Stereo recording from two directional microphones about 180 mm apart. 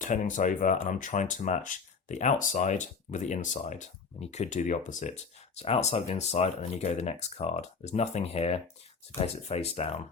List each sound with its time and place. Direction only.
0.0 s speech: 45° left (ahead or behind)